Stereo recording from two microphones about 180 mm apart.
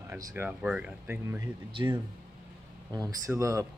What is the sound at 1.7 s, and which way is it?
Speech, 25° right (ahead or behind).